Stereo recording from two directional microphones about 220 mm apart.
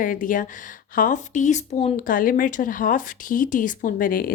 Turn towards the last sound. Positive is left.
turn(degrees=40)  # may be behind; listen again after turning